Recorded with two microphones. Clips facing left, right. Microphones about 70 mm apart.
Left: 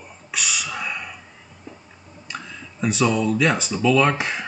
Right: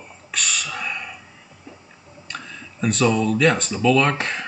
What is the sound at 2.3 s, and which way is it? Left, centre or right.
Speech, centre.